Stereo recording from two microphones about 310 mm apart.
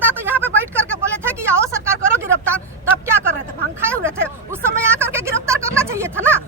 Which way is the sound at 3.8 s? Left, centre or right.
Centre.